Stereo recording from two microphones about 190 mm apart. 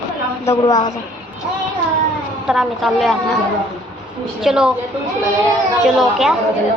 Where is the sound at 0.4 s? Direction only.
15° left (ahead or behind).